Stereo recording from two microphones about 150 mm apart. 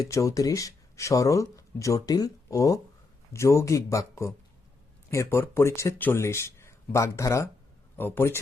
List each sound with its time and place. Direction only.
0.1 s speech: 20° left (ahead or behind)